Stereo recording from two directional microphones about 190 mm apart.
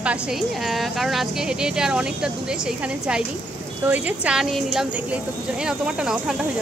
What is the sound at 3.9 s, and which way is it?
Speech, 5° right (ahead or behind).